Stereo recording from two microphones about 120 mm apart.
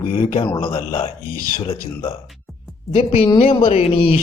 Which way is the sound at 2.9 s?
50° left (ahead or behind).